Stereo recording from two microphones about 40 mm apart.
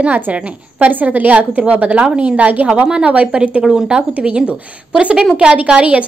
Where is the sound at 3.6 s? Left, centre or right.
Centre.